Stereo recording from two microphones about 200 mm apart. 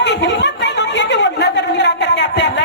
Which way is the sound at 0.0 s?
60° left (ahead or behind).